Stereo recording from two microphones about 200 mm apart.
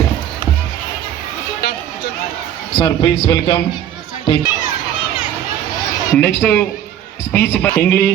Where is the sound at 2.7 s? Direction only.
25° left (ahead or behind).